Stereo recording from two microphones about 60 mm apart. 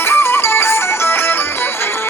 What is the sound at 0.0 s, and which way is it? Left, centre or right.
Music, left.